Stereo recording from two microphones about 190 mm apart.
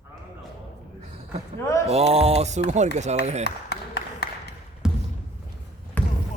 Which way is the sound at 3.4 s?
60° left (ahead or behind).